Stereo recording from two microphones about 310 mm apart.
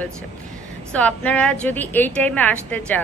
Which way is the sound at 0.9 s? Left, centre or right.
Centre.